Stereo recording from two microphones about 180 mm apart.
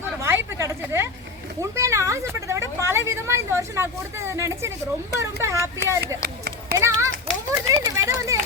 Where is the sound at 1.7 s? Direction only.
15° right (ahead or behind).